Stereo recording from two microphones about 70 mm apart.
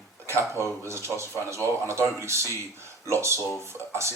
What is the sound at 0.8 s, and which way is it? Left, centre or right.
Speech, right.